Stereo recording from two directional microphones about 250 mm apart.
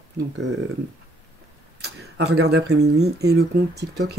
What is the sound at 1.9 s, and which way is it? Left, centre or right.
Speech, right.